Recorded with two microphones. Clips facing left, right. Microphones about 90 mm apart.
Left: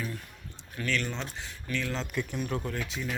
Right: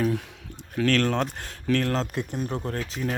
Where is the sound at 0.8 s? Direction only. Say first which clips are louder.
Right 10 dB; 80° right; by 2.0 s 60° right (ahead or behind).